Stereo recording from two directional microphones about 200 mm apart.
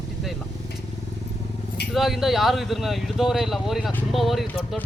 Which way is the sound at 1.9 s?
Centre (ahead or behind).